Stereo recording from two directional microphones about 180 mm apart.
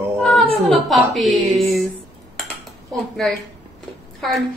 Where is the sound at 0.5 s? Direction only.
Centre (ahead or behind).